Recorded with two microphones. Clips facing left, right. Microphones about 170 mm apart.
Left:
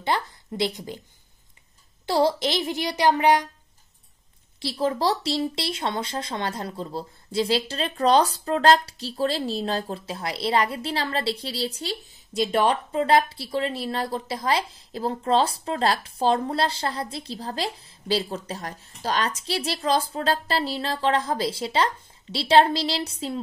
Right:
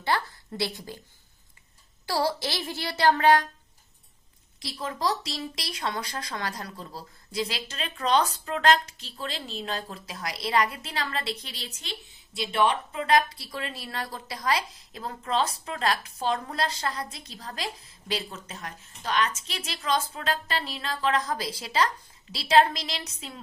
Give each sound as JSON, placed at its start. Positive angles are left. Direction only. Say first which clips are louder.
{"t": 0.0, "sound": "a woman's voice", "louder": "left 2 dB", "side_deg": 20}
{"t": 2.0, "sound": "a woman's voice", "louder": "left 6 dB", "side_deg": 20}
{"t": 4.6, "sound": "speech", "louder": "left 9 dB", "side_deg": 30}